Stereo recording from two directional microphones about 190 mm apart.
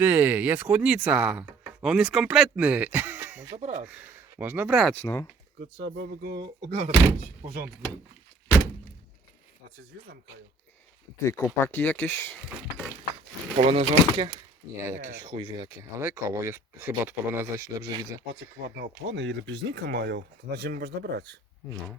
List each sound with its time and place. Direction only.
0.0 s speech: 10° right (ahead or behind)
3.5 s speech: 35° right (ahead or behind)
3.8 s speech: 10° right (ahead or behind)
4.9 s speech: 10° left (ahead or behind)
5.5 s speech: 70° right (ahead or behind)
6.7 s speech: 35° right (ahead or behind)
11.2 s speech: 15° left (ahead or behind)
13.6 s speech: 30° right (ahead or behind)
15.3 s speech: 25° right (ahead or behind)
18.8 s speech: 70° right (ahead or behind); by 21.2 s 55° right (ahead or behind)